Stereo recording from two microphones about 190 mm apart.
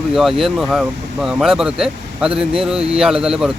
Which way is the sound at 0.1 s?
Centre (ahead or behind).